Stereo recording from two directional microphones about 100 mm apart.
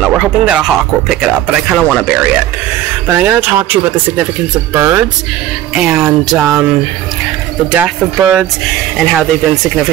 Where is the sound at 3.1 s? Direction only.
20° right (ahead or behind).